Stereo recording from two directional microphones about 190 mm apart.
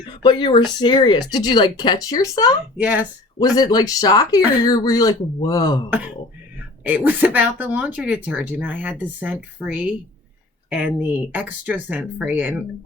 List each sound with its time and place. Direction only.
0.0 s speech: 25° left (ahead or behind)
2.8 s speech: 10° right (ahead or behind)
3.3 s speech: 20° left (ahead or behind)
6.8 s speech: 10° right (ahead or behind)